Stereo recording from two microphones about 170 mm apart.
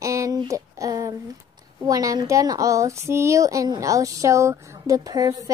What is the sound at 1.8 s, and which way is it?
Speech, 20° right (ahead or behind).